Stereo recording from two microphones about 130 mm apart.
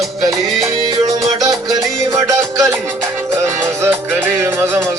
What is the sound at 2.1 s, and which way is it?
Music, 25° right (ahead or behind).